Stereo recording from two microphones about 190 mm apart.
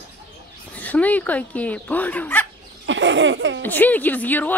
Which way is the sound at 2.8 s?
75° right (ahead or behind).